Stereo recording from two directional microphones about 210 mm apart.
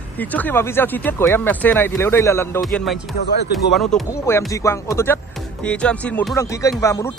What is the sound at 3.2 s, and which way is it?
Speech, 50° left (ahead or behind).